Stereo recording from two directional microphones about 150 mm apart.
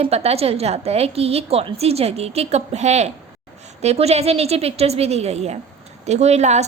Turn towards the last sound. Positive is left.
turn(degrees=-50)  # may be behind; listen again after turning